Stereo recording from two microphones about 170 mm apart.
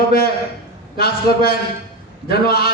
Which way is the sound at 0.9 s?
65° left (ahead or behind).